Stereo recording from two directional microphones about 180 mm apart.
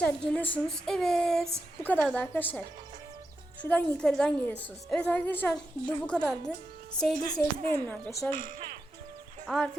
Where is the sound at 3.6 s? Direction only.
5° left (ahead or behind).